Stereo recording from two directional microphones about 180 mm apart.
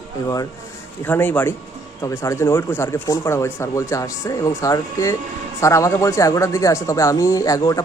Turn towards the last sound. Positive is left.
turn(degrees=20)  # may be behind; listen again after turning